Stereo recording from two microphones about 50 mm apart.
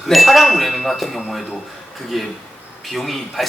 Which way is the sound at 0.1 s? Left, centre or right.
Centre.